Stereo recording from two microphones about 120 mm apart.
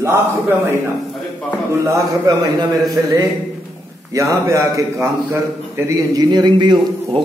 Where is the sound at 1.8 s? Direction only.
30° right (ahead or behind).